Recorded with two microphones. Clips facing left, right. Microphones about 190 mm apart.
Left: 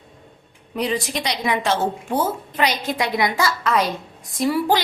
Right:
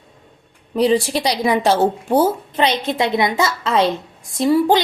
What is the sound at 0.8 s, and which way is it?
A woman's voice, 30° right (ahead or behind).